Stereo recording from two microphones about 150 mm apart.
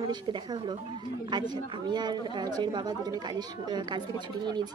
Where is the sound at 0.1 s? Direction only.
30° right (ahead or behind).